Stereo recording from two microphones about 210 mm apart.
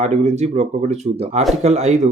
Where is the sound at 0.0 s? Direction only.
35° right (ahead or behind).